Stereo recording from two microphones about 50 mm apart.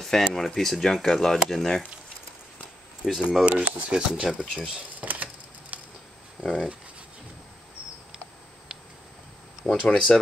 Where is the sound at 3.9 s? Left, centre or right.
Right.